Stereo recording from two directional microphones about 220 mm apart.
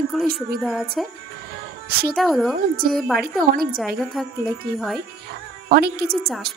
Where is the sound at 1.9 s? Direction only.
45° right (ahead or behind).